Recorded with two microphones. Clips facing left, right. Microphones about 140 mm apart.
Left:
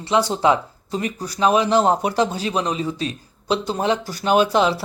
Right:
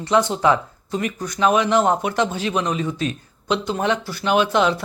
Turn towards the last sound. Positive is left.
turn(degrees=30)  # may be behind; listen again after turning